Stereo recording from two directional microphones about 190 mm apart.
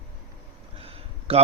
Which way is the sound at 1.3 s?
35° right (ahead or behind).